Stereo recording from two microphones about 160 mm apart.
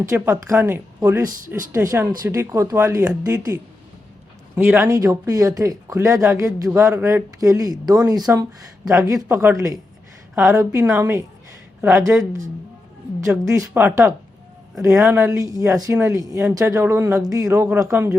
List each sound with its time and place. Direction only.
0.0 s speech: 20° right (ahead or behind)
13.4 s speech: 20° right (ahead or behind)